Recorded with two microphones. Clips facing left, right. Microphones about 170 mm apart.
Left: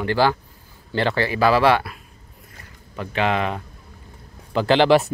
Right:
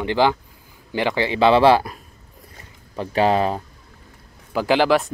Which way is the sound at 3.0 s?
35° right (ahead or behind).